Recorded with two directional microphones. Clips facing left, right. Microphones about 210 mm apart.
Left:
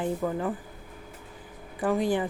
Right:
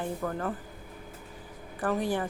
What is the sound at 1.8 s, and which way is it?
Speech, 15° left (ahead or behind).